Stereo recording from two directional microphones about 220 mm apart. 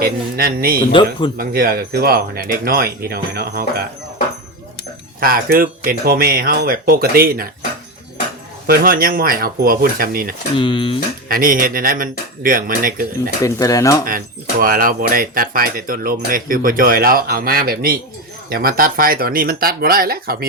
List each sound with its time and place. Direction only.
0.0 s speech: 45° right (ahead or behind)
5.2 s speech: 40° right (ahead or behind)
8.6 s speech: 45° right (ahead or behind)
10.6 s speech: 20° left (ahead or behind)
11.3 s speech: 40° right (ahead or behind)
13.4 s speech: 15° left (ahead or behind)
14.6 s speech: 40° right (ahead or behind)